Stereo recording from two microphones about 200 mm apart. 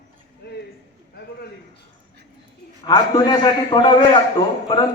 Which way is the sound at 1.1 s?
55° left (ahead or behind).